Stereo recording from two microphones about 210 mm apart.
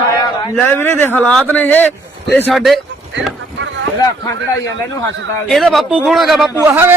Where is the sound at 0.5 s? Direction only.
10° left (ahead or behind).